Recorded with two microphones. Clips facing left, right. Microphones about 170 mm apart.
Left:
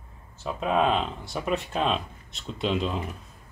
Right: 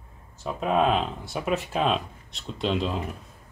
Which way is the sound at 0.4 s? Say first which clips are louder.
Right 1 dB; centre (ahead or behind).